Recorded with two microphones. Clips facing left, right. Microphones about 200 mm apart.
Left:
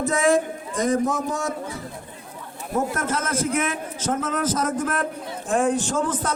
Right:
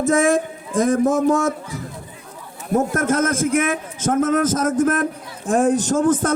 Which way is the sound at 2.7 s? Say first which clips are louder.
Right 6 dB; 45° right (ahead or behind).